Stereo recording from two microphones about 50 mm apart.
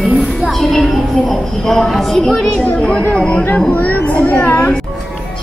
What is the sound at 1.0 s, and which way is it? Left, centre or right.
A woman's voice, centre.